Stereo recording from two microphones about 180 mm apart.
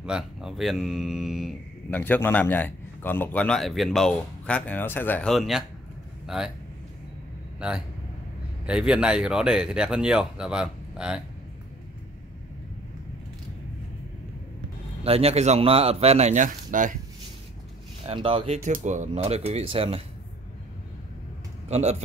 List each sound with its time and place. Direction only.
0.0 s speech: 5° right (ahead or behind)
2.0 s a man's voice: 10° left (ahead or behind)
8.6 s speech: 5° right (ahead or behind)
15.0 s speech: 35° right (ahead or behind)
18.0 s speech: 30° right (ahead or behind)
21.6 s speech: 40° right (ahead or behind)